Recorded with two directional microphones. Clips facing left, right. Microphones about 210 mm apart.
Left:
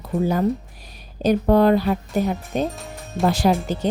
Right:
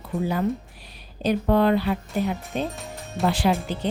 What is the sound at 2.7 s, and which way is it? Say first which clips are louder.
Speech: left 2 dB; centre (ahead or behind).